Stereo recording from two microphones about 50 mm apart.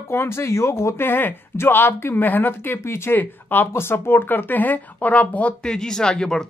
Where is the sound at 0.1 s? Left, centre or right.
Left.